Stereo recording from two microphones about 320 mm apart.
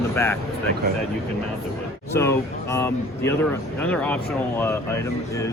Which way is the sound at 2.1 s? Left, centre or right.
Centre.